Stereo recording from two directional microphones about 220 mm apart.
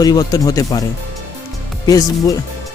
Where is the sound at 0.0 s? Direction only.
15° left (ahead or behind).